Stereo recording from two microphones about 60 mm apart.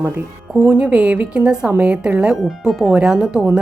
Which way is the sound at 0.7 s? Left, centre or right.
Centre.